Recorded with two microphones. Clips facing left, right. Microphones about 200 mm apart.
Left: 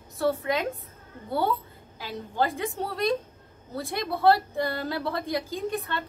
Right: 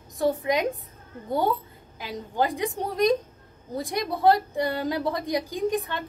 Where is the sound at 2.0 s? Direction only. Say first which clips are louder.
Right 1 dB; 15° right (ahead or behind).